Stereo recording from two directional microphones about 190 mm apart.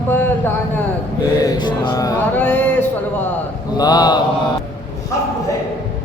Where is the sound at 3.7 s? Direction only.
20° left (ahead or behind).